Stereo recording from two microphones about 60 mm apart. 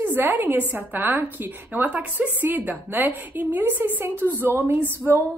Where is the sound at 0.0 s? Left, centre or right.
Right.